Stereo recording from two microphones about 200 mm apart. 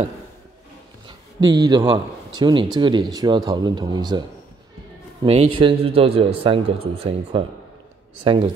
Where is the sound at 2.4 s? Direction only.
25° right (ahead or behind).